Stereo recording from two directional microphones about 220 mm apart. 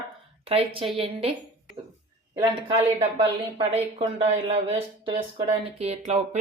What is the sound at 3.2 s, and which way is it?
Speech, 25° right (ahead or behind).